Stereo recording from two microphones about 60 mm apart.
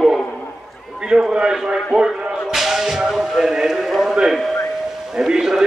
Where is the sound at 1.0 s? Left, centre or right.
Centre.